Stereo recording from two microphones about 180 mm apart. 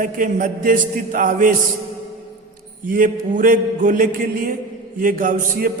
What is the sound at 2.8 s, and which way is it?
A man's voice, 50° right (ahead or behind).